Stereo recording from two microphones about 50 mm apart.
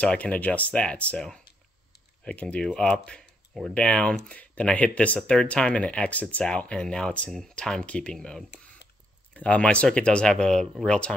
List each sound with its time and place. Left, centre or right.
0.0 s speech: left
2.2 s speech: left
9.3 s speech: left